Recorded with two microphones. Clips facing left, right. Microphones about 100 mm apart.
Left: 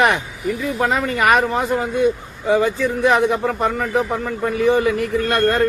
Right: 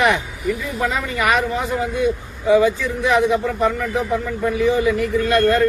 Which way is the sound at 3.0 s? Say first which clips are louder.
Even; 50° left (ahead or behind).